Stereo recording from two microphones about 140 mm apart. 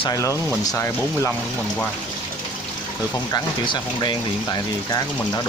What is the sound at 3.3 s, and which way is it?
Speech, 35° left (ahead or behind).